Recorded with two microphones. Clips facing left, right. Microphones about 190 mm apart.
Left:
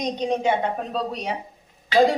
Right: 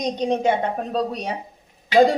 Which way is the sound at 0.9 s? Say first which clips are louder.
Right 3 dB; 40° right (ahead or behind).